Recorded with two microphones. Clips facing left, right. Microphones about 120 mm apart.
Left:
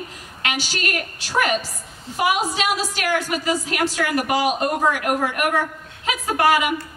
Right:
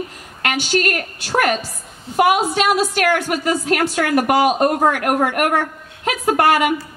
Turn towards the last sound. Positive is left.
turn(degrees=-55)  # may be behind; listen again after turning